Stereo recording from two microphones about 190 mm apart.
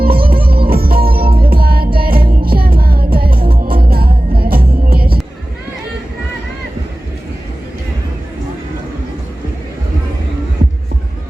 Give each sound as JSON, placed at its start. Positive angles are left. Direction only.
{"t": 0.0, "sound": "music", "side_deg": -50}